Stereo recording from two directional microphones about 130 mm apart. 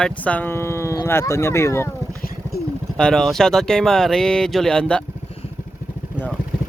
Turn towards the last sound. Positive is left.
turn(degrees=10)  # may be behind; listen again after turning